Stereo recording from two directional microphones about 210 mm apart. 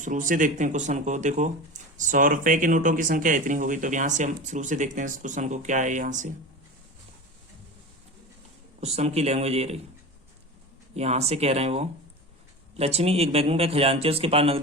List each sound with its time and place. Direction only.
0.0 s speech: 40° right (ahead or behind)
8.8 s speech: 30° right (ahead or behind)
10.9 s speech: 30° right (ahead or behind)